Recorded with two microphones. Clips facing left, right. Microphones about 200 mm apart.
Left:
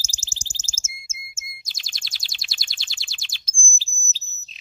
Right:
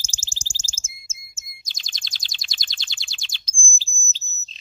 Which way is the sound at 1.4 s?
5° left (ahead or behind).